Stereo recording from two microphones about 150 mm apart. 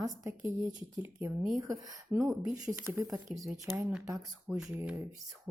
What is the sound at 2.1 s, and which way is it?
A woman's voice, 5° right (ahead or behind).